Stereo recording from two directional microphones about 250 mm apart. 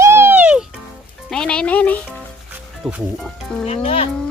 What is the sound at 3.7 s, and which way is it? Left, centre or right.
Speech, left.